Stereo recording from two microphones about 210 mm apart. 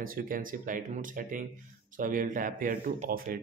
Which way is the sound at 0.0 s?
40° right (ahead or behind).